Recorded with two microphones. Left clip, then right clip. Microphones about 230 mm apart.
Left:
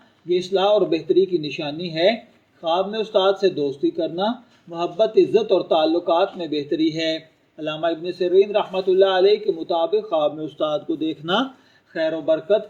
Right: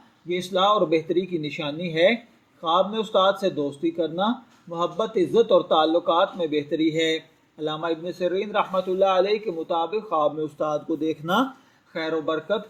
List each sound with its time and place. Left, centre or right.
0.3 s a man's voice: right